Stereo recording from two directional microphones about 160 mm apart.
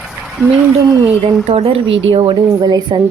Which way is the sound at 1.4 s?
35° right (ahead or behind).